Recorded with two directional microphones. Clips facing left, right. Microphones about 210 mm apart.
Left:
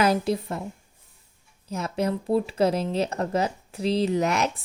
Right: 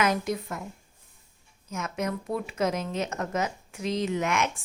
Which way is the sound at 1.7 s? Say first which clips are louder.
Left 5 dB; 35° left (ahead or behind).